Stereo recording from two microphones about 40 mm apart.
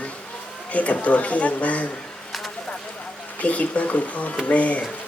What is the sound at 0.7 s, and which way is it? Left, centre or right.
Speech, left.